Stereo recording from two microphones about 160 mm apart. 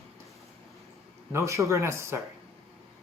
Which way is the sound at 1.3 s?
20° right (ahead or behind).